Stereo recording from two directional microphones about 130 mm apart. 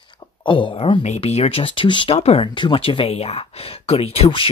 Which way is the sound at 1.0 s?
55° left (ahead or behind).